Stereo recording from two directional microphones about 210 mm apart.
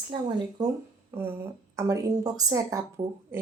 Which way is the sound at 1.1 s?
10° right (ahead or behind).